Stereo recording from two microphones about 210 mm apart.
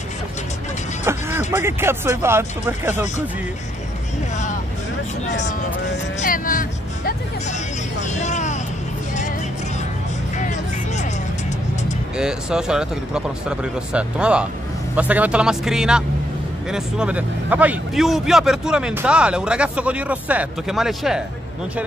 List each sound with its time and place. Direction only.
1.1 s music: 10° right (ahead or behind)
1.5 s speech: 10° right (ahead or behind)
5.2 s speech: 35° left (ahead or behind)
10.3 s music: 35° left (ahead or behind)
12.2 s a man's voice: 5° right (ahead or behind)